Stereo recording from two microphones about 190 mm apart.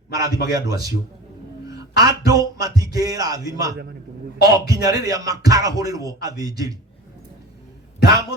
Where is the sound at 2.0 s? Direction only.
20° right (ahead or behind).